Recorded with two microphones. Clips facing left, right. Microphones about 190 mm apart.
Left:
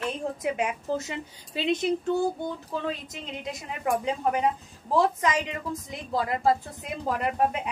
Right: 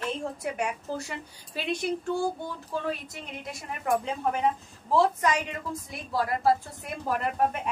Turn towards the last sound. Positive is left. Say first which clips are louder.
# left 1 dB
turn(degrees=20)  # may be behind; listen again after turning